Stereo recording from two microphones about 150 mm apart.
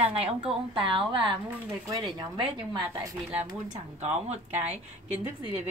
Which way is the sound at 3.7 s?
50° right (ahead or behind).